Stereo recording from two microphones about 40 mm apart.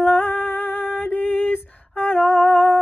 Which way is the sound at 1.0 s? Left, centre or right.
Left.